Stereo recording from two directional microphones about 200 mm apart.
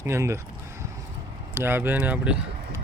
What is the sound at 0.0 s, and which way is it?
Speech, 15° right (ahead or behind).